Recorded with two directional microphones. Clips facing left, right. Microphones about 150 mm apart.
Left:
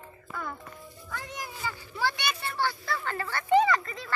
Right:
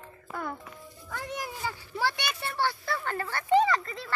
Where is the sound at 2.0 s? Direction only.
75° right (ahead or behind).